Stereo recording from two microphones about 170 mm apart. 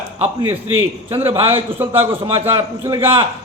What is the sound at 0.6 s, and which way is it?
A man's voice, 15° right (ahead or behind).